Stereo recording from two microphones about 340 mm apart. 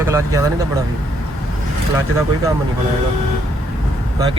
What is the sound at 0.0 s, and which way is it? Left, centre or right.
Speech, centre.